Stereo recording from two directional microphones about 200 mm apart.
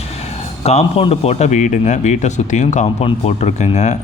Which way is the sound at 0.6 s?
30° left (ahead or behind).